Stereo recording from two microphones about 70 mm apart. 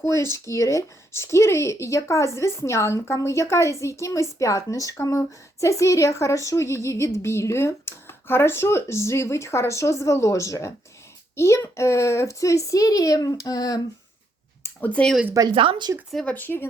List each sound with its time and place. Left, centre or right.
0.0 s speech: left
15.0 s speech: centre
15.4 s speech: right
16.2 s speech: left